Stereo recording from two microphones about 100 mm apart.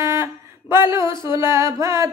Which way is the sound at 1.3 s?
30° right (ahead or behind).